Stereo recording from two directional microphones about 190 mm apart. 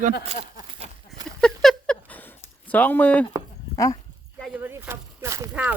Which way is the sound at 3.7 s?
15° left (ahead or behind).